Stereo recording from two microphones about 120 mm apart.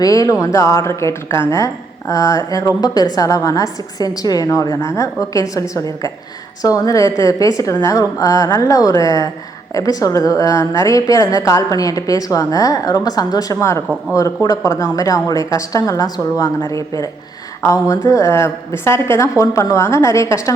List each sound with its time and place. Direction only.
0.0 s a woman's voice: 30° left (ahead or behind)
13.8 s a man's voice: 10° right (ahead or behind)
14.4 s a woman's voice: 25° left (ahead or behind)